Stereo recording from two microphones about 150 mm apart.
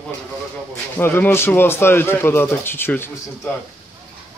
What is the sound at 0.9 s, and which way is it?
Speech, 15° left (ahead or behind).